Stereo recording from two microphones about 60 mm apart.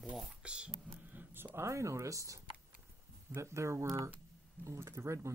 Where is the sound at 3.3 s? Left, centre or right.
Right.